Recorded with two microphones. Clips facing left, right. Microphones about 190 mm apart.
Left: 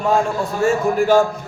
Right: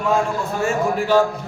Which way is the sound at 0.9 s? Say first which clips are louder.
Left 3 dB; 45° left (ahead or behind).